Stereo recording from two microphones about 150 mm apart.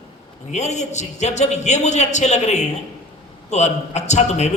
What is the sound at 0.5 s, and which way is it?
A man's voice, 50° left (ahead or behind).